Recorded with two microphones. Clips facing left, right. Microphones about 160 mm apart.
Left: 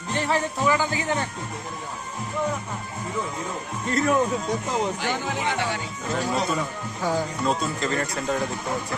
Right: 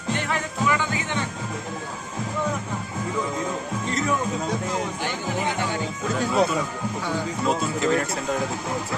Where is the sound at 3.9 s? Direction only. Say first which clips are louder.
Left 4 dB; 50° left (ahead or behind).